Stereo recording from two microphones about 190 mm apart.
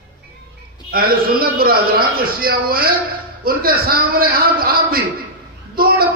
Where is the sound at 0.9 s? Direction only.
50° right (ahead or behind).